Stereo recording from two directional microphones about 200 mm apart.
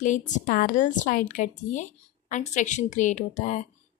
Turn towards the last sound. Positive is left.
turn(degrees=35)  # may be behind; listen again after turning